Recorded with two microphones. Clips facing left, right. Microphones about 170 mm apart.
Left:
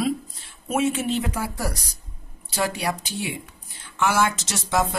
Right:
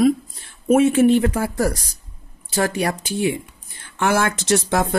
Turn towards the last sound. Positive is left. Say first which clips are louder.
# right 5 dB
turn(degrees=-55)  # may be behind; listen again after turning